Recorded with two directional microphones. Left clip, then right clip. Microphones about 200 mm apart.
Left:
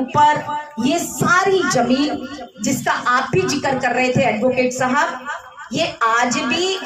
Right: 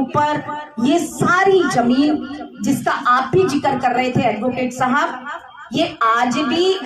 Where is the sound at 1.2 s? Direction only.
55° right (ahead or behind).